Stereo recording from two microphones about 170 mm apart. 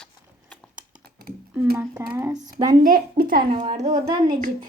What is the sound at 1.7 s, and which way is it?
Speech, 5° right (ahead or behind).